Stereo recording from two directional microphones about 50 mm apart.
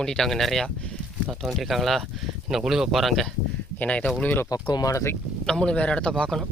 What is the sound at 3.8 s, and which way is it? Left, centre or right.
Speech, left.